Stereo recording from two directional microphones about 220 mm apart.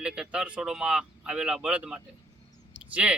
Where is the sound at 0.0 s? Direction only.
5° right (ahead or behind).